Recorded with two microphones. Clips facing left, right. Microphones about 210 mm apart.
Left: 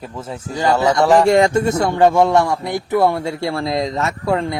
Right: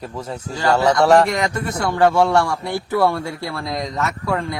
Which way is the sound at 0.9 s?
Centre (ahead or behind).